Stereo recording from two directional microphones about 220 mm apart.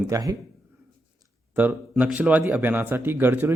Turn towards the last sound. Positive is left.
turn(degrees=-10)  # may be behind; listen again after turning